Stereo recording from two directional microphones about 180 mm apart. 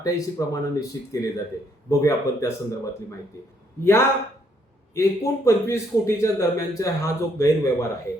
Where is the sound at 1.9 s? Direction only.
15° left (ahead or behind).